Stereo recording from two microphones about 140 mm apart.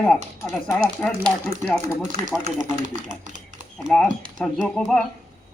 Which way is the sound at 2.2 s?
50° right (ahead or behind).